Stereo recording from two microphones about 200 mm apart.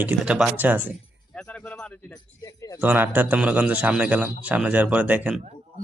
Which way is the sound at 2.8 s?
10° right (ahead or behind).